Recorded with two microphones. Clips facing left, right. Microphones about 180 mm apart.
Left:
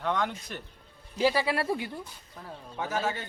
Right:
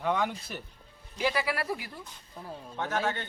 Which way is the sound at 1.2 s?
30° left (ahead or behind).